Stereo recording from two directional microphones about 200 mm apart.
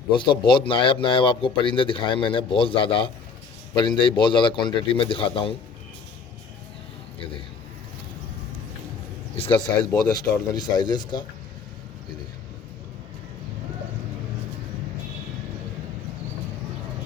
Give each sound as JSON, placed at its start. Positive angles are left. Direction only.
{"t": 0.2, "sound": "speech", "side_deg": 25}
{"t": 9.3, "sound": "speech", "side_deg": 25}